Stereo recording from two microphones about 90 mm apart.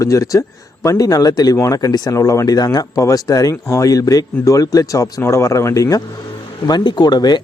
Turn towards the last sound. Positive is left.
turn(degrees=50)  # may be behind; listen again after turning